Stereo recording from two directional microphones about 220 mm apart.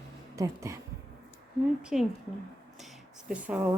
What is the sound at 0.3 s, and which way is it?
Speech, 15° right (ahead or behind).